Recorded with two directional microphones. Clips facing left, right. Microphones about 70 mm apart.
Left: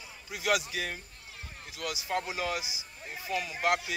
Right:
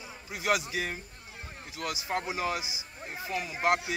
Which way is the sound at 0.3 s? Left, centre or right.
Right.